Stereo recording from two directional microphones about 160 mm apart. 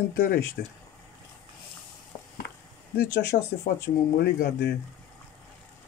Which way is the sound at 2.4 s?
90° left.